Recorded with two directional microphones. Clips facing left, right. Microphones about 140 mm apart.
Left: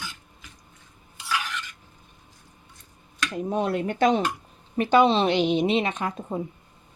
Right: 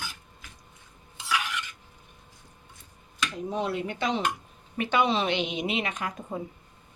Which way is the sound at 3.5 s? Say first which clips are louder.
Left 5 dB; 50° left (ahead or behind).